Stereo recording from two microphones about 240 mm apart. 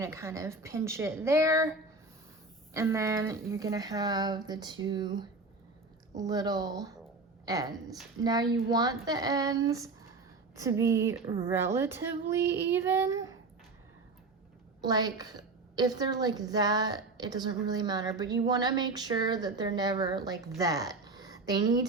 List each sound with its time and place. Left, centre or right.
0.0 s a woman's voice: centre
2.7 s a woman's voice: centre
14.8 s a woman's voice: centre